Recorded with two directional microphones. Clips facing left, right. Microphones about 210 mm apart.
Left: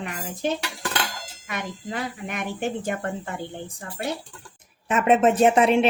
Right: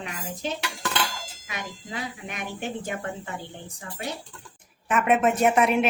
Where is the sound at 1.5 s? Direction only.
50° left (ahead or behind).